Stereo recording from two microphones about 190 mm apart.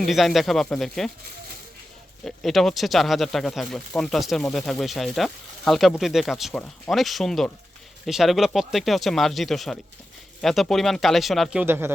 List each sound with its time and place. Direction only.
0.0 s speech: centre (ahead or behind)
2.2 s speech: centre (ahead or behind)
11.6 s speech: 10° right (ahead or behind)